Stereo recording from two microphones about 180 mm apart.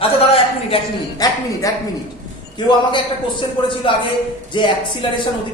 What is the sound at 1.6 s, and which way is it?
Speech, 20° left (ahead or behind).